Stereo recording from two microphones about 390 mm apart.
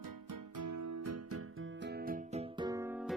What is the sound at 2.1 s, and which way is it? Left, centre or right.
Music, centre.